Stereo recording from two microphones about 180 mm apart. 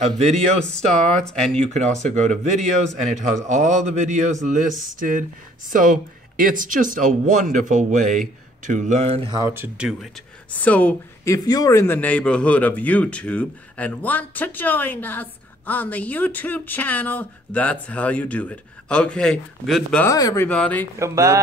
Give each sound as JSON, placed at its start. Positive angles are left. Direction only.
{"t": 0.7, "sound": "speech", "side_deg": 5}
{"t": 1.5, "sound": "speech", "side_deg": -35}
{"t": 9.4, "sound": "speech", "side_deg": -10}
{"t": 10.5, "sound": "a woman's voice", "side_deg": 10}
{"t": 11.3, "sound": "speech", "side_deg": 20}
{"t": 20.1, "sound": "speech", "side_deg": 20}
{"t": 20.4, "sound": "speech", "side_deg": 5}
{"t": 21.0, "sound": "speech", "side_deg": -15}